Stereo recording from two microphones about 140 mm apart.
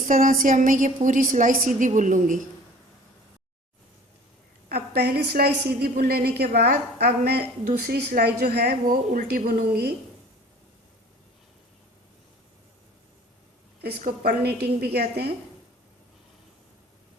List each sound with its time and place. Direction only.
0.1 s a woman's voice: 80° right
4.7 s a woman's voice: 90° right
14.0 s a woman's voice: 90° right